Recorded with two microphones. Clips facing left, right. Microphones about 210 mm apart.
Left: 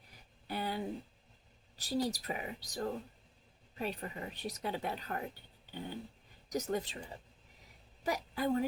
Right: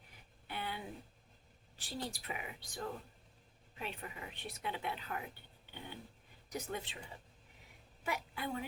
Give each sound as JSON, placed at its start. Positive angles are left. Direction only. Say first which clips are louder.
{"t": 0.4, "sound": "a sound", "louder": "left 6 dB", "side_deg": 40}
{"t": 1.7, "sound": "speech", "louder": "left 9 dB", "side_deg": 40}
{"t": 8.0, "sound": "a woman's voice", "louder": "left 7 dB", "side_deg": 40}